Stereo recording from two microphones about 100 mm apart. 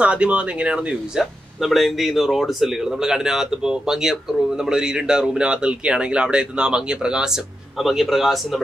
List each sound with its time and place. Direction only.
0.0 s speech: 10° right (ahead or behind)